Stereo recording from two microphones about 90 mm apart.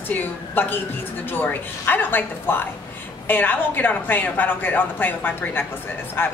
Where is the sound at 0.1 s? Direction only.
20° left (ahead or behind).